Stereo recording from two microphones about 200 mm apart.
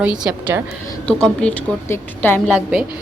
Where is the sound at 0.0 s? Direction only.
5° right (ahead or behind).